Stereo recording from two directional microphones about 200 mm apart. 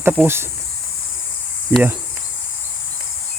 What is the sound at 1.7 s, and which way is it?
Speech, 10° right (ahead or behind).